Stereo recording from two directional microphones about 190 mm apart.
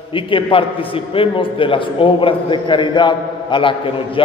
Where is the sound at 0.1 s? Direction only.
25° left (ahead or behind).